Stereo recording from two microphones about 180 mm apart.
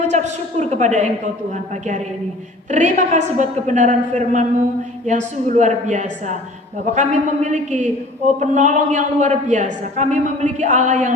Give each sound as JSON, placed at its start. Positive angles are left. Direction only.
{"t": 0.0, "sound": "a woman's voice", "side_deg": -40}
{"t": 2.6, "sound": "a woman's voice", "side_deg": -40}